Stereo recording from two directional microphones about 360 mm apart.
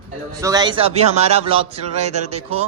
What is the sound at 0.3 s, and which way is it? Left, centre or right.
A man's voice, centre.